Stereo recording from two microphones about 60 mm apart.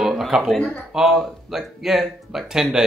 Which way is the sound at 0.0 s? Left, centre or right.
Centre.